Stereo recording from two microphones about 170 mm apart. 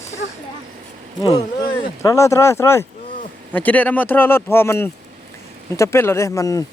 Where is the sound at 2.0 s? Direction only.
15° left (ahead or behind).